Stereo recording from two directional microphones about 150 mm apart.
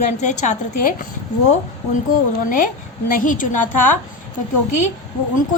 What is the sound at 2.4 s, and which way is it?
A woman's voice, 60° left (ahead or behind).